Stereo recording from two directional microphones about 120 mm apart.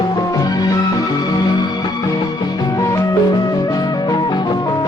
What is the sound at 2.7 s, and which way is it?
Music, 25° left (ahead or behind).